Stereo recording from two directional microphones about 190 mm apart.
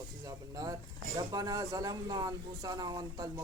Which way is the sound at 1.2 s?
20° right (ahead or behind).